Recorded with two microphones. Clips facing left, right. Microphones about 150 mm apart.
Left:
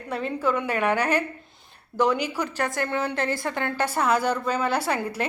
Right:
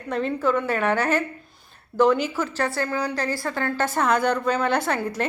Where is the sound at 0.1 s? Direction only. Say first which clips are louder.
Right 3 dB; 10° left (ahead or behind).